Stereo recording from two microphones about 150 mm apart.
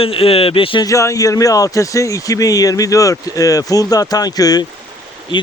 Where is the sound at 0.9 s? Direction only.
20° left (ahead or behind).